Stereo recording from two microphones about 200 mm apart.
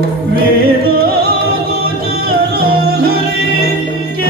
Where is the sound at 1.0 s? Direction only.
50° right (ahead or behind).